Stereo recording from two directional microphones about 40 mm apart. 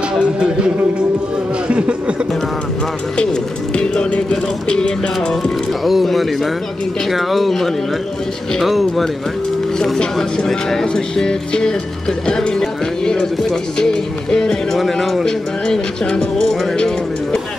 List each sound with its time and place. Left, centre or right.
1.7 s speech: right
3.7 s speech: left
4.6 s music: centre
5.7 s speech: centre
10.3 s speech: centre
14.8 s speech: centre
15.2 s speech: centre